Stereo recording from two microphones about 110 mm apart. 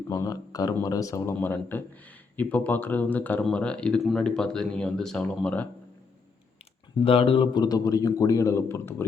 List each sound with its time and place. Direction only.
0.1 s a man's voice: 35° left (ahead or behind); by 5.6 s 10° left (ahead or behind)
7.0 s a man's voice: 55° left (ahead or behind); by 9.0 s 20° left (ahead or behind)